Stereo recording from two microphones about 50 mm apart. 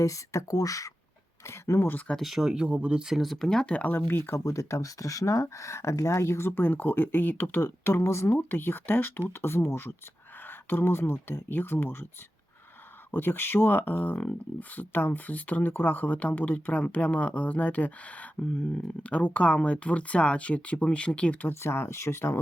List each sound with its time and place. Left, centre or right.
0.0 s speech: left
1.5 s speech: left
2.2 s speech: centre
3.1 s speech: centre
3.8 s speech: left
4.4 s speech: left
6.5 s speech: left
8.3 s speech: left
10.4 s speech: left
13.1 s speech: left
21.5 s speech: left